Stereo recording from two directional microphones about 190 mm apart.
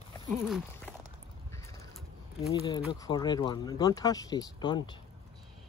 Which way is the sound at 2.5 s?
20° left (ahead or behind).